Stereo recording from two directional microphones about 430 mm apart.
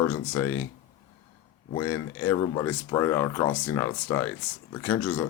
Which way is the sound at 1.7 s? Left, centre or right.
Centre.